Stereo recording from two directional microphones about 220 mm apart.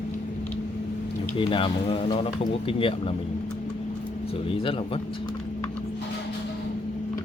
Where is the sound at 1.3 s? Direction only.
25° left (ahead or behind).